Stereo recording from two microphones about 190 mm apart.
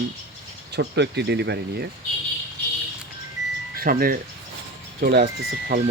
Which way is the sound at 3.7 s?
50° right (ahead or behind).